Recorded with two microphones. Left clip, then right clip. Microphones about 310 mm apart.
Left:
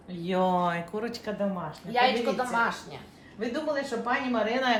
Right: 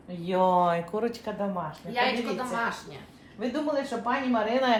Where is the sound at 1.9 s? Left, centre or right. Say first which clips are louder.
Left 3 dB; centre.